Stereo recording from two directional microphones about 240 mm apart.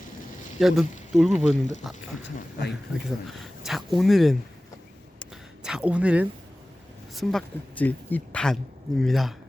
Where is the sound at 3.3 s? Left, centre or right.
Centre.